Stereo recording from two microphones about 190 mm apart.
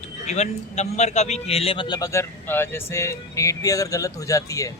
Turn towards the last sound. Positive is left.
turn(degrees=15)  # may be behind; listen again after turning